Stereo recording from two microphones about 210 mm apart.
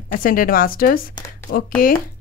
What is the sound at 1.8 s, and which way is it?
Speech, 40° left (ahead or behind).